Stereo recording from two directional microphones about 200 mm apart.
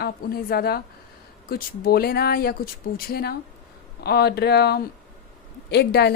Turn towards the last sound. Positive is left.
turn(degrees=55)  # may be behind; listen again after turning